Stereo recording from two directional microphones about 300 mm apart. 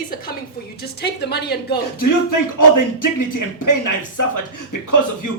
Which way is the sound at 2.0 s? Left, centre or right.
Left.